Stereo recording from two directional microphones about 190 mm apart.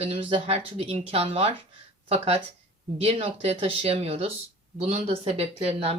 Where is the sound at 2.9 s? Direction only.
30° right (ahead or behind).